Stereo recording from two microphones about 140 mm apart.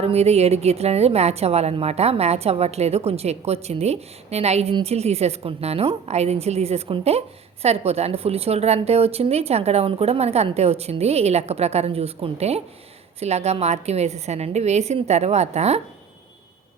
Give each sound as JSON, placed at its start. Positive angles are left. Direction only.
{"t": 0.0, "sound": "a woman's voice", "side_deg": -45}